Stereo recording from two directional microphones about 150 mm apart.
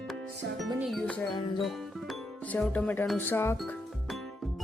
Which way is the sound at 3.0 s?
10° left (ahead or behind).